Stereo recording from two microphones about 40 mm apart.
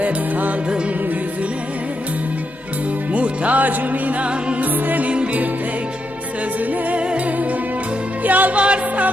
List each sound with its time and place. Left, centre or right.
0.0 s music: right
3.1 s music: right
5.1 s music: right
6.9 s music: right
8.5 s music: right